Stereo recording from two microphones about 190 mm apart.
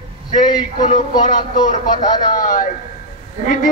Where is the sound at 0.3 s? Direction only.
40° left (ahead or behind).